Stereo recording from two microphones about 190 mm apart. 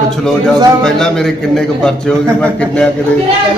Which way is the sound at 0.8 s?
5° left (ahead or behind).